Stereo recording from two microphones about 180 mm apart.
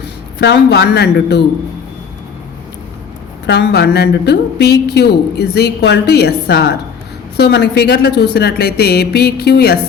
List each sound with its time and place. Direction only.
0.3 s speech: 70° left (ahead or behind)
3.4 s a woman's voice: 70° left (ahead or behind)